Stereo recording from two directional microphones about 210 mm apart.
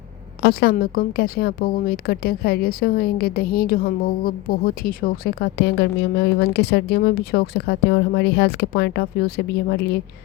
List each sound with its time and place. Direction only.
0.4 s a woman's voice: 45° left (ahead or behind)